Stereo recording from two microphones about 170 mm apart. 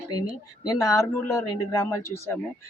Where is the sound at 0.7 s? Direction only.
20° left (ahead or behind).